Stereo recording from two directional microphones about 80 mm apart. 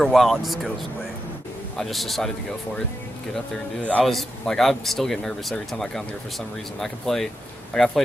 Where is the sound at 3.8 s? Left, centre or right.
Centre.